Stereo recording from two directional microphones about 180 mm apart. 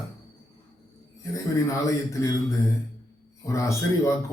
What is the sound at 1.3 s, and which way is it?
Speech, 15° left (ahead or behind).